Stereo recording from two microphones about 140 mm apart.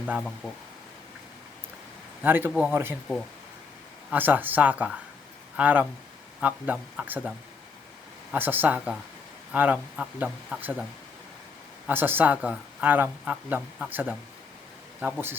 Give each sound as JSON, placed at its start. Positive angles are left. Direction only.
{"t": 0.2, "sound": "speech", "side_deg": 5}
{"t": 2.2, "sound": "speech", "side_deg": -15}
{"t": 2.5, "sound": "speech", "side_deg": 0}
{"t": 2.7, "sound": "speech", "side_deg": -15}
{"t": 4.1, "sound": "speech", "side_deg": -15}
{"t": 8.3, "sound": "speech", "side_deg": -15}
{"t": 11.9, "sound": "speech", "side_deg": -15}